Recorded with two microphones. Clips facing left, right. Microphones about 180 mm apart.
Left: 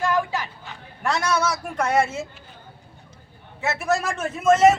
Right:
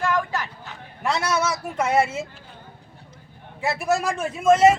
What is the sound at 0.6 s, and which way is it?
A man's voice, 5° right (ahead or behind).